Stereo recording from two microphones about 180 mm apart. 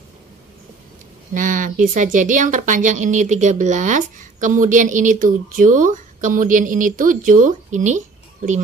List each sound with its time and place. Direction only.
1.3 s speech: 45° right (ahead or behind)